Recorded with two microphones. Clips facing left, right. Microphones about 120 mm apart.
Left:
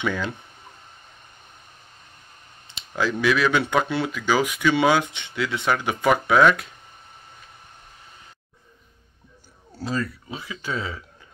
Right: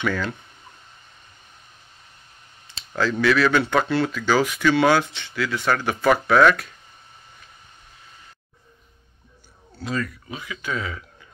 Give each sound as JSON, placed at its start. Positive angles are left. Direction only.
{"t": 0.0, "sound": "speech", "side_deg": 15}
{"t": 3.0, "sound": "speech", "side_deg": 15}
{"t": 9.8, "sound": "speech", "side_deg": 30}